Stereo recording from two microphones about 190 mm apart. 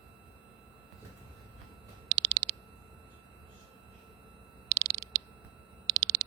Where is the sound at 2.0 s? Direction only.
55° right (ahead or behind).